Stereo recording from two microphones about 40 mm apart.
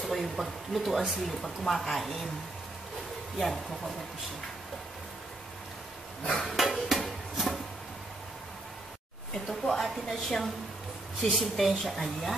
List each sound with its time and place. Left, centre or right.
0.0 s speech: centre
3.3 s speech: centre
6.4 s a sound: centre
9.5 s a woman's voice: centre